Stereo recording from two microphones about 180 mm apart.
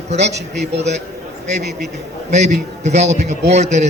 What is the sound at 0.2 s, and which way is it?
Speech, 70° right (ahead or behind).